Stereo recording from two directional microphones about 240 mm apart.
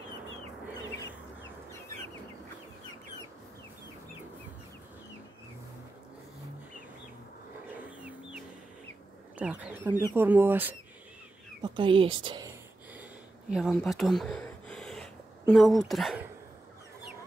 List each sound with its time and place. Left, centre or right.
7.7 s chicken: centre
9.4 s speech: centre
11.6 s speech: centre
13.5 s speech: centre